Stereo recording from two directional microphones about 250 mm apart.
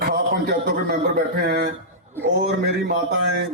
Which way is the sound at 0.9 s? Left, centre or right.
Right.